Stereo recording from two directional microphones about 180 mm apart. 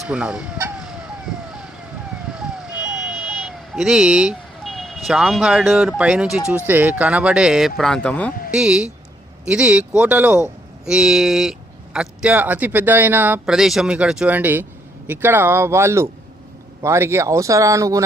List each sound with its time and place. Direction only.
0.0 s speech: 5° right (ahead or behind)
2.3 s buzzer: 5° right (ahead or behind)
6.0 s speech: 5° right (ahead or behind)
8.4 s speech: 5° right (ahead or behind)